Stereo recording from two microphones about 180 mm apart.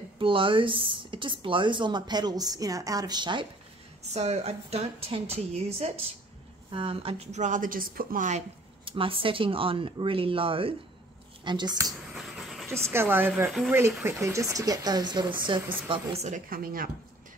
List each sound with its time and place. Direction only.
0.2 s speech: 30° right (ahead or behind)
4.1 s a woman's voice: 35° right (ahead or behind)
8.8 s speech: 30° right (ahead or behind)
12.1 s vehicle: centre (ahead or behind)
12.6 s speech: 15° right (ahead or behind)
13.5 s speech: centre (ahead or behind)
14.2 s speech: 15° right (ahead or behind)
15.9 s a woman's voice: 35° right (ahead or behind); by 16.9 s 55° right (ahead or behind)